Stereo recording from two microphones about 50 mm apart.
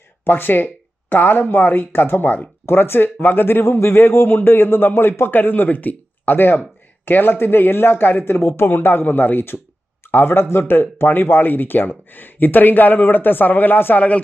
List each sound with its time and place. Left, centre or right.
0.3 s a man's voice: left
2.6 s a man's voice: left